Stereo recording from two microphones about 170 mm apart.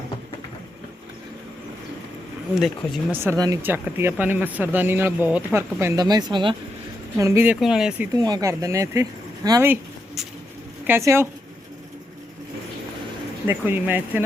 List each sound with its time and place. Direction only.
2.6 s speech: centre (ahead or behind)
3.2 s speech: 20° right (ahead or behind)
7.2 s speech: 15° right (ahead or behind)
8.1 s speech: 20° right (ahead or behind)
10.8 s speech: 15° right (ahead or behind)
13.5 s speech: 10° right (ahead or behind)